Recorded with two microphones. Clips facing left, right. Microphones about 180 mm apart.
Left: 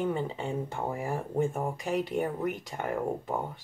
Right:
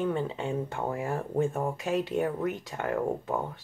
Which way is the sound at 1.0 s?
15° left (ahead or behind).